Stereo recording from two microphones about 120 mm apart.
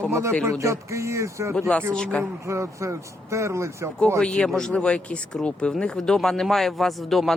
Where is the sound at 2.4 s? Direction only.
25° right (ahead or behind).